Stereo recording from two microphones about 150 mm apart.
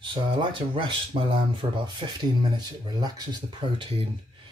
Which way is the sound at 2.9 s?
30° right (ahead or behind).